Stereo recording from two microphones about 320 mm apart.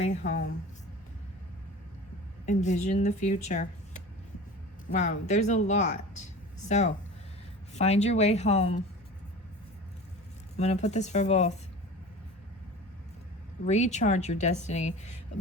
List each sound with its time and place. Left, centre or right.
0.0 s speech: left
2.5 s speech: left
10.6 s speech: left
13.7 s speech: left